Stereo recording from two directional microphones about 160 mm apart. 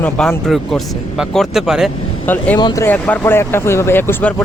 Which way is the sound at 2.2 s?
10° left (ahead or behind).